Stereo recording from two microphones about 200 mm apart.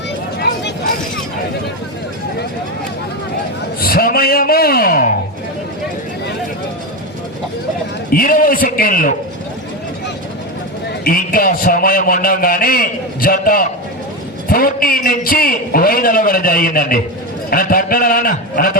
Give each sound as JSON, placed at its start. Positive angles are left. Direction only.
{"t": 3.8, "sound": "a sound", "side_deg": 50}
{"t": 8.1, "sound": "a man's voice", "side_deg": 45}
{"t": 11.0, "sound": "a man's voice", "side_deg": 45}